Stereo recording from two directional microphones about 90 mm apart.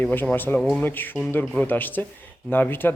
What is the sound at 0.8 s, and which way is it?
Speech, 20° left (ahead or behind).